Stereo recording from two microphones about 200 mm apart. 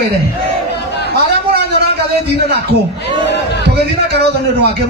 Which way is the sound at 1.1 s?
55° right (ahead or behind).